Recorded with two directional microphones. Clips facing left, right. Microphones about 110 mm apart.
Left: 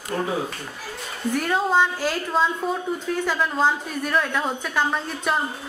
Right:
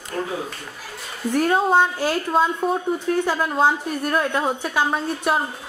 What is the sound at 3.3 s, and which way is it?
A woman's voice, 10° right (ahead or behind).